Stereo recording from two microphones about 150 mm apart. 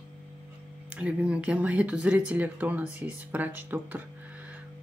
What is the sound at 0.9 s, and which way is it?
Speech, 10° right (ahead or behind).